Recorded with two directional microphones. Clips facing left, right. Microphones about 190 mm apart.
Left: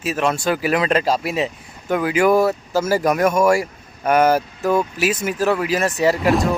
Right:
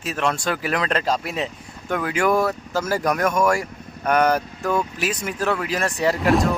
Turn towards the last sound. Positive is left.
turn(degrees=0)  # may be behind; listen again after turning